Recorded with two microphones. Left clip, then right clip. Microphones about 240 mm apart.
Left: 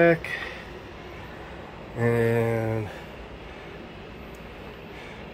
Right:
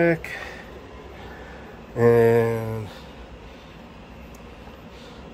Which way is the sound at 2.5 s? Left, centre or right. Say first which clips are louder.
Left 2 dB; centre.